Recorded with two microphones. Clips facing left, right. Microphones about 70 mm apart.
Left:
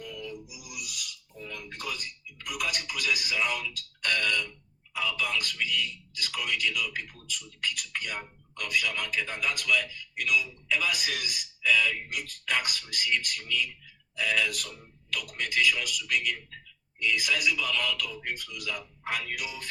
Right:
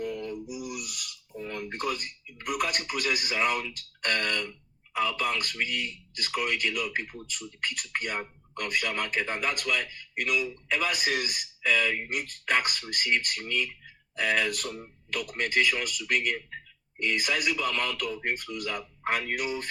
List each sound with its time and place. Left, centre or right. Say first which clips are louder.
0.0 s music: right 6 dB; right
0.4 s a sound: right 7 dB; right
4.9 s a man's voice: right 3 dB; right